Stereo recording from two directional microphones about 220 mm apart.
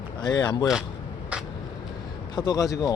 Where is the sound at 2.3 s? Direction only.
15° left (ahead or behind).